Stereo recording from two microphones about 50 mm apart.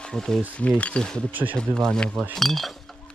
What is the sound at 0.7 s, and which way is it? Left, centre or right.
Speech, left.